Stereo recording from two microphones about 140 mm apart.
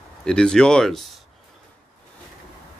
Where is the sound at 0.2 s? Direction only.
5° left (ahead or behind).